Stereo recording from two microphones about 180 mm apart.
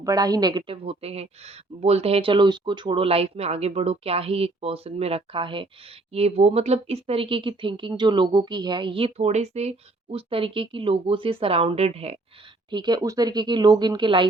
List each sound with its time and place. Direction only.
0.0 s a woman's voice: 20° right (ahead or behind)
12.7 s speech: 25° right (ahead or behind)